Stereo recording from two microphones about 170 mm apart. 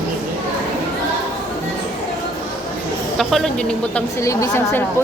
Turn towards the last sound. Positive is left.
turn(degrees=15)  # may be behind; listen again after turning